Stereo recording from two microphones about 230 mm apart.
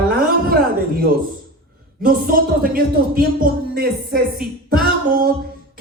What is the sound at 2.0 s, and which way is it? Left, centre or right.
Music, right.